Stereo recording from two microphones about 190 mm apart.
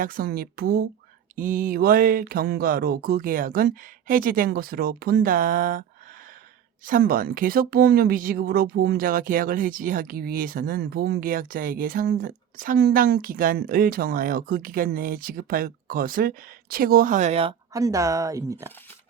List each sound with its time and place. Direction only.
0.0 s speech: 50° right (ahead or behind)
6.8 s speech: 50° right (ahead or behind)
17.7 s speech: 15° right (ahead or behind)